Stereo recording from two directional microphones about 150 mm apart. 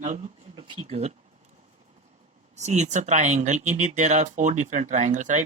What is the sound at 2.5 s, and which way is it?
Speech, 50° right (ahead or behind).